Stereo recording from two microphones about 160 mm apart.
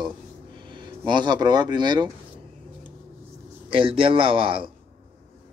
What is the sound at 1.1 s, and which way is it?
Speech, 30° right (ahead or behind).